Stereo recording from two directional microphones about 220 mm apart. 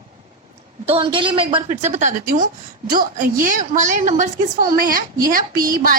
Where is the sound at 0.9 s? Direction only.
25° right (ahead or behind).